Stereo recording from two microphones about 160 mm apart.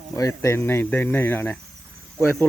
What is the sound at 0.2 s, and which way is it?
Speech, 20° left (ahead or behind).